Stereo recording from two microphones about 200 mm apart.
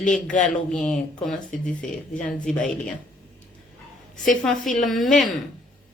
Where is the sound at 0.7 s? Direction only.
5° left (ahead or behind).